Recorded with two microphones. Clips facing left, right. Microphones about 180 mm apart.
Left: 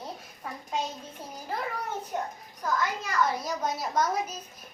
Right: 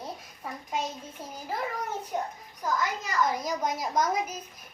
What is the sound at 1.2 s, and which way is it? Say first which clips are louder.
Speech: right 2 dB; 15° left (ahead or behind).